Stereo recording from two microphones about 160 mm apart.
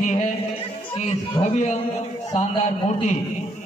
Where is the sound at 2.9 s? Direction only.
50° left (ahead or behind).